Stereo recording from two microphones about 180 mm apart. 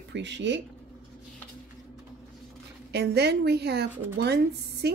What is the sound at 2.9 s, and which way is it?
Speech, 65° right (ahead or behind).